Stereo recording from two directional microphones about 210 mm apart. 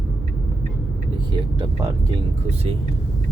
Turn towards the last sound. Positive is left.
turn(degrees=-20)  # may be behind; listen again after turning